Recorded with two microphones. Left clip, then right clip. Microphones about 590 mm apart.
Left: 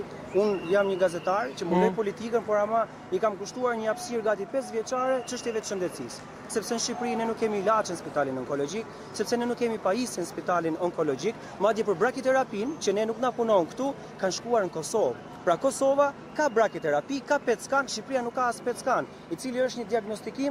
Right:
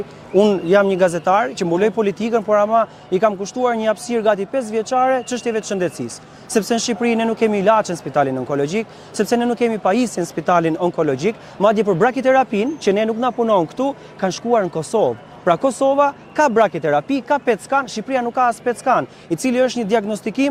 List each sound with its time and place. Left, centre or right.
0.3 s speech: right
19.4 s speech: right